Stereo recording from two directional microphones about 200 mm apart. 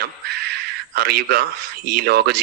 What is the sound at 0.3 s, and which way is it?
A man's voice, 50° right (ahead or behind).